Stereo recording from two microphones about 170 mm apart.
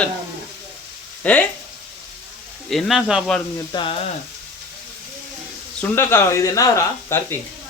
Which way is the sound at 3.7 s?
30° left (ahead or behind).